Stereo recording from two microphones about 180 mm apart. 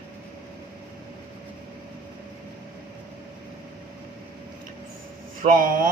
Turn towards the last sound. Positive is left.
turn(degrees=-50)  # may be behind; listen again after turning